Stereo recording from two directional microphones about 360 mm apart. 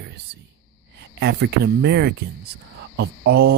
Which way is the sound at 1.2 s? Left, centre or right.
Right.